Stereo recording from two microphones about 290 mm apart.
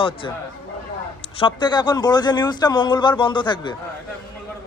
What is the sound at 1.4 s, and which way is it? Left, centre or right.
A man's voice, centre.